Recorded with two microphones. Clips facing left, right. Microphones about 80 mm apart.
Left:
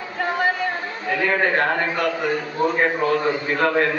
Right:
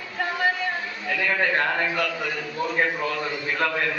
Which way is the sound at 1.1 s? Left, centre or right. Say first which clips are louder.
Left 4 dB; left.